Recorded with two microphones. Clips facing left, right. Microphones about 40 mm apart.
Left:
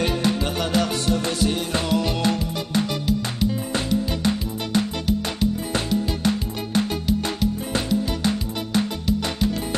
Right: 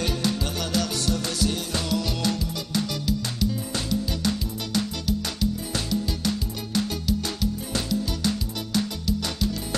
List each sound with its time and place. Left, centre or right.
0.0 s music: left